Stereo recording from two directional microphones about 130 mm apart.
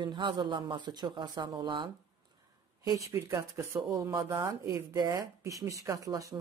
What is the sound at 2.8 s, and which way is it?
Speech, 25° right (ahead or behind).